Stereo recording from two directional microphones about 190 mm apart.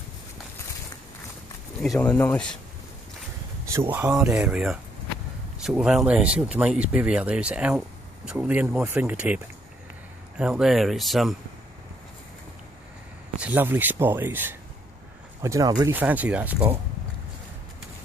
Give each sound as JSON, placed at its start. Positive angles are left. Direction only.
{"t": 1.8, "sound": "speech", "side_deg": 5}
{"t": 3.9, "sound": "speech", "side_deg": -10}
{"t": 13.4, "sound": "speech", "side_deg": -10}